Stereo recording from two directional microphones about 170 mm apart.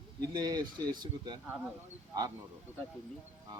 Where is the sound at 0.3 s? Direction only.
25° right (ahead or behind).